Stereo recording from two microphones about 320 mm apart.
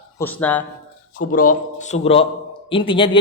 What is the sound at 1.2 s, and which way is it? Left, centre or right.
A man's voice, left.